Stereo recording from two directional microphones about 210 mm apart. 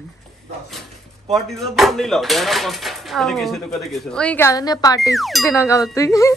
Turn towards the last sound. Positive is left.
turn(degrees=15)  # may be behind; listen again after turning